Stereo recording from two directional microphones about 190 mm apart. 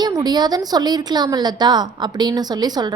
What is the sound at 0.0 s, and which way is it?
Speech, 20° right (ahead or behind).